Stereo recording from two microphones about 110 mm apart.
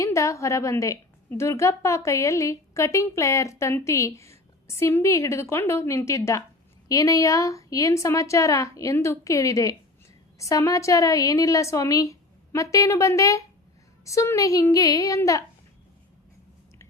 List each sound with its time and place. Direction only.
0.0 s a woman's voice: 30° left (ahead or behind)